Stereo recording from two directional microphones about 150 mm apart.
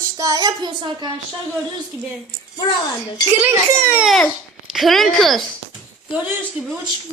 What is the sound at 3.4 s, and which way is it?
Speech, 15° right (ahead or behind).